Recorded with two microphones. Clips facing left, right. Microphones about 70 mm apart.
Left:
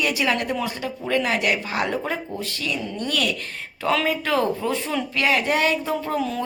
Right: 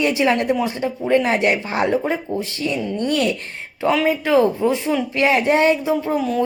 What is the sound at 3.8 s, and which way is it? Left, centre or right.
A woman's voice, centre.